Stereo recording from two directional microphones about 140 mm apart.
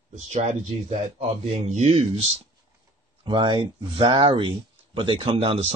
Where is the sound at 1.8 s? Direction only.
45° right (ahead or behind).